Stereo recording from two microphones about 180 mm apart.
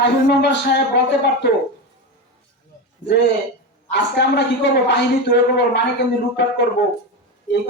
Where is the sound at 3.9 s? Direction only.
70° left (ahead or behind).